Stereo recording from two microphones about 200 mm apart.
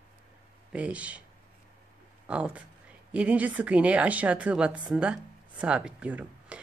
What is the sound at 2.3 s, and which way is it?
Speech, 5° right (ahead or behind).